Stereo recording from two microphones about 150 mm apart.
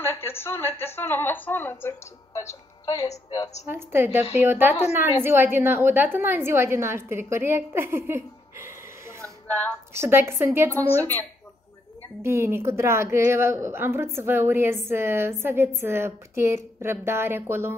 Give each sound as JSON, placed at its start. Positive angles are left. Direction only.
{"t": 0.0, "sound": "a woman's voice", "side_deg": 15}
{"t": 3.6, "sound": "a woman's voice", "side_deg": -15}
{"t": 9.5, "sound": "a woman's voice", "side_deg": 10}
{"t": 9.9, "sound": "a woman's voice", "side_deg": -15}
{"t": 10.7, "sound": "a woman's voice", "side_deg": 10}
{"t": 12.2, "sound": "a woman's voice", "side_deg": -15}